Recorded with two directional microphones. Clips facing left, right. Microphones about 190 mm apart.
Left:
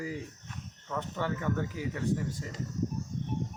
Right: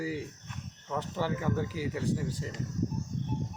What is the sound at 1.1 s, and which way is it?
Speech, 5° right (ahead or behind).